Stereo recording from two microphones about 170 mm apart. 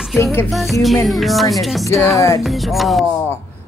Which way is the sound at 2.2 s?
15° left (ahead or behind).